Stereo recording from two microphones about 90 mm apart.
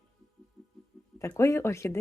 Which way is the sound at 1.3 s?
30° left (ahead or behind).